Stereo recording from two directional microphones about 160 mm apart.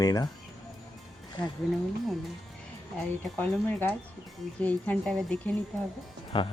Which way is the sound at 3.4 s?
10° left (ahead or behind).